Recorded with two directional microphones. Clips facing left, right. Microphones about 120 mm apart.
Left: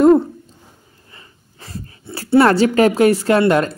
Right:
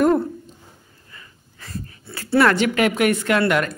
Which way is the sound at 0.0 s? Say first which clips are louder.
Left 6 dB; 20° left (ahead or behind).